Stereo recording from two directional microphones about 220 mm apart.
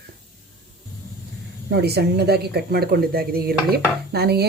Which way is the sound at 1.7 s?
50° right (ahead or behind).